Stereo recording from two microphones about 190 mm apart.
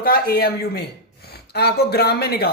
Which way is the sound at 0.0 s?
55° left (ahead or behind).